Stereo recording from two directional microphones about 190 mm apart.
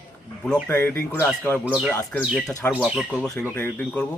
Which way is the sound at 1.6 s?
5° right (ahead or behind).